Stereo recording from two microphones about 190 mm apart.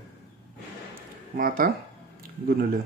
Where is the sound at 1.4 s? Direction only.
50° right (ahead or behind).